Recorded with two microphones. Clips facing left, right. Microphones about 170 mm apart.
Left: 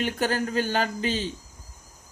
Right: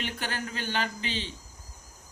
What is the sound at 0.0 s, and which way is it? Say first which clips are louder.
Speech: left 9 dB; 40° left (ahead or behind).